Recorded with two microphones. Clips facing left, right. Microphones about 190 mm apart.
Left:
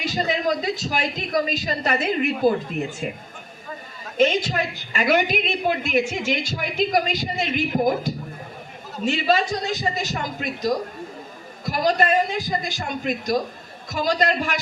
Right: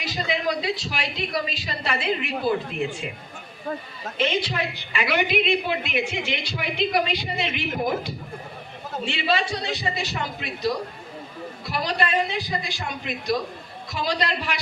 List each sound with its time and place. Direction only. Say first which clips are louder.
0.0 s a woman's voice: left 3 dB; 45° left (ahead or behind)
4.2 s a woman's voice: left 5 dB; 45° left (ahead or behind)